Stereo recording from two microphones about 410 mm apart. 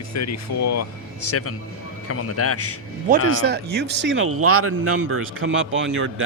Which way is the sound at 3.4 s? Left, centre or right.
Right.